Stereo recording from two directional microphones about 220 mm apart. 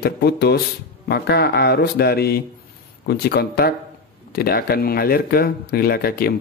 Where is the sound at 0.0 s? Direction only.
45° left (ahead or behind).